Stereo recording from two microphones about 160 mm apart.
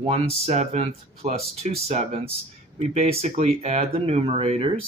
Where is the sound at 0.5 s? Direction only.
45° right (ahead or behind).